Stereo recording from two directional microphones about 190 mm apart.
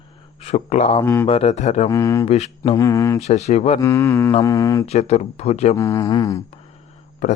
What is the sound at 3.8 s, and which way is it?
Speech, 15° left (ahead or behind).